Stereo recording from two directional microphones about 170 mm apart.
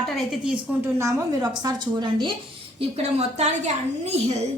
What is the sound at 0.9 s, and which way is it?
A woman's voice, 20° right (ahead or behind).